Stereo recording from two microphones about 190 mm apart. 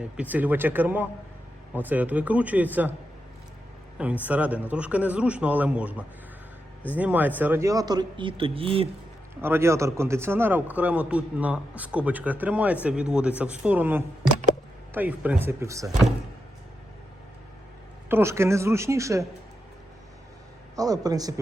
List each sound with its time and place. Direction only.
0.0 s a man's voice: 10° right (ahead or behind)
3.9 s a man's voice: 10° right (ahead or behind); by 8.9 s 30° right (ahead or behind)
9.4 s a man's voice: 10° right (ahead or behind)
18.1 s a man's voice: 15° right (ahead or behind)
20.7 s speech: 20° right (ahead or behind)